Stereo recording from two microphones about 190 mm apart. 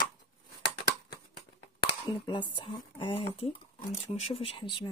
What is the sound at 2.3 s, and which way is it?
Speech, 25° left (ahead or behind).